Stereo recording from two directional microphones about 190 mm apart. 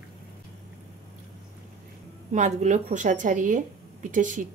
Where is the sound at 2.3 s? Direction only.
35° right (ahead or behind).